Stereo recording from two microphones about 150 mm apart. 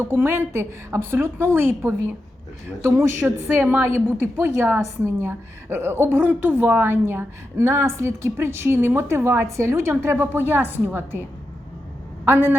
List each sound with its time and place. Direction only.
0.0 s a woman's voice: 15° right (ahead or behind)
12.2 s a woman's voice: 15° right (ahead or behind)